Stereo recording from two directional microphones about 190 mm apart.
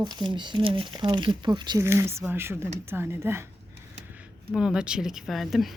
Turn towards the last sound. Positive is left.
turn(degrees=0)  # may be behind; listen again after turning